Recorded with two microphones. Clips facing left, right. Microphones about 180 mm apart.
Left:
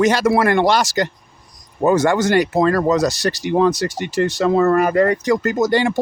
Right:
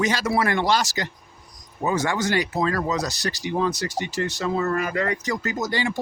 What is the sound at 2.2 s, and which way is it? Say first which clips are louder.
Speech: left 8 dB; 65° left (ahead or behind).